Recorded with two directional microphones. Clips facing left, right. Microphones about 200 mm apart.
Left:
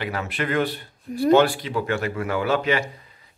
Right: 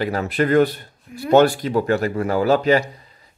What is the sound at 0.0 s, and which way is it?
Speech, 40° right (ahead or behind).